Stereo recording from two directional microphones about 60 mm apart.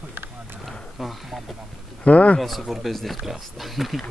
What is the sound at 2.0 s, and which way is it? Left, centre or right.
Speech, left.